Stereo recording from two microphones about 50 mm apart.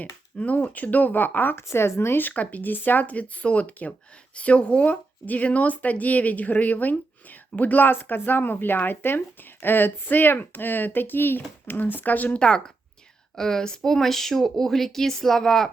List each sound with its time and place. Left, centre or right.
0.0 s speech: left
1.7 s speech: left
2.2 s speech: left
12.4 s speech: centre